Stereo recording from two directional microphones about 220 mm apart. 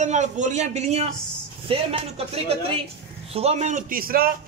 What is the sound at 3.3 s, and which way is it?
Speech, 30° right (ahead or behind).